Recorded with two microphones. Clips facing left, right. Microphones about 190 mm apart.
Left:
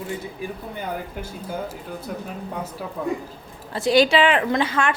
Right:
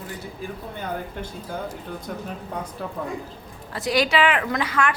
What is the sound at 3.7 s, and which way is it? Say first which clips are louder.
A woman's voice: left 5 dB; 25° left (ahead or behind).